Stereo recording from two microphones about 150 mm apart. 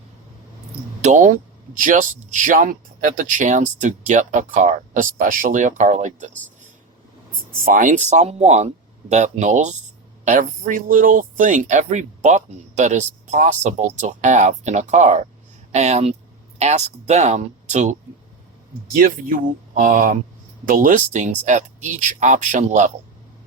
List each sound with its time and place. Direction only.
1.0 s speech: 55° right (ahead or behind)
18.9 s speech: 70° right (ahead or behind)